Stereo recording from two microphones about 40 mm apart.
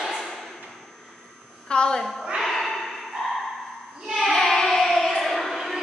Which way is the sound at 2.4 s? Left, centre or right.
Centre.